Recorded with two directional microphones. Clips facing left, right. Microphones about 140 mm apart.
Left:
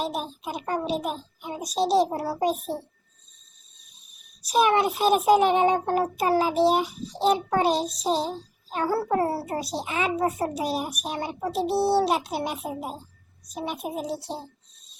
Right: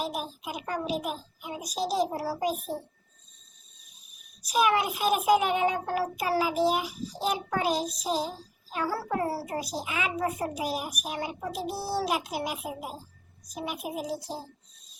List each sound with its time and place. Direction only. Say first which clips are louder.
0.0 s a woman's voice: left 3 dB; 30° left (ahead or behind)
4.4 s a woman's voice: left 4 dB; 30° left (ahead or behind)